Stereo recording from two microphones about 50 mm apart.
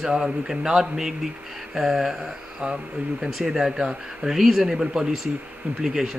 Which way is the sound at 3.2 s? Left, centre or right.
Centre.